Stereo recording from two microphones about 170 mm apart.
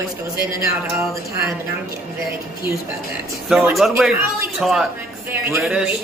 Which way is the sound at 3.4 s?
5° right (ahead or behind).